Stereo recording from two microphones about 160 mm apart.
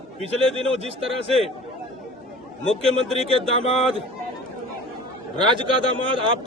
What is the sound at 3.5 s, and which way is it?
Speech, 40° left (ahead or behind).